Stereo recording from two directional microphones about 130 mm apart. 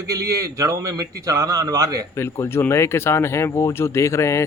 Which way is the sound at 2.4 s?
20° left (ahead or behind).